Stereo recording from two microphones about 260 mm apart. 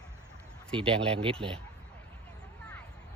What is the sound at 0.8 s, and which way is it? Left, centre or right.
Speech, right.